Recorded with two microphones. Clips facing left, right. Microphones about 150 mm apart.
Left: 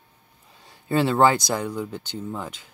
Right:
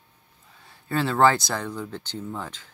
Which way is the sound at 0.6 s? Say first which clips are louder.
Left 4 dB; 15° left (ahead or behind).